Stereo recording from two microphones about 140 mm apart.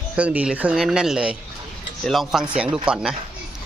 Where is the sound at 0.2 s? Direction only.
10° right (ahead or behind).